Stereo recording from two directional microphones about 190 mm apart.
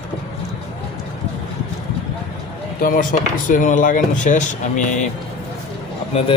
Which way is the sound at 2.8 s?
45° left (ahead or behind).